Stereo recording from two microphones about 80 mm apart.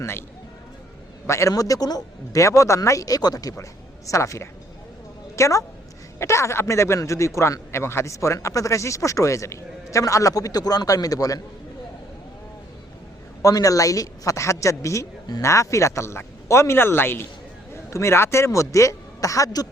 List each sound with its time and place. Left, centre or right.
0.0 s speech: left
1.3 s a woman's voice: left
3.6 s a woman's voice: left
13.4 s a woman's voice: left